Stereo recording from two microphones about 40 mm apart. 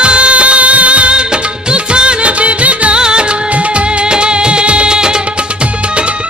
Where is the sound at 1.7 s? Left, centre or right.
Right.